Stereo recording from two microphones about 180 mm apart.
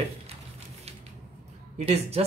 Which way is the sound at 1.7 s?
35° right (ahead or behind).